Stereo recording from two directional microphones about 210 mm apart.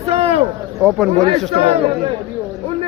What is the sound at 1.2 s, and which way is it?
Speech, 25° right (ahead or behind).